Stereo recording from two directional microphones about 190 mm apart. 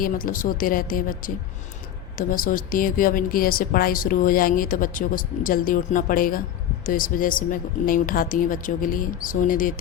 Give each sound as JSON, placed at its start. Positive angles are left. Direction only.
{"t": 0.0, "sound": "speech", "side_deg": 45}